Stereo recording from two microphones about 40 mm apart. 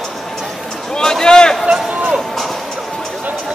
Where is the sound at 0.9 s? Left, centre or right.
Centre.